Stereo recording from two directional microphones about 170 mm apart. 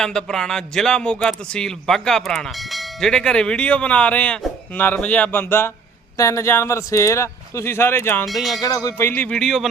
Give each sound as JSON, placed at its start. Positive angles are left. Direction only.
{"t": 0.0, "sound": "a man's voice", "side_deg": 5}
{"t": 8.3, "sound": "a man's voice", "side_deg": 0}
{"t": 8.6, "sound": "a man's voice", "side_deg": 20}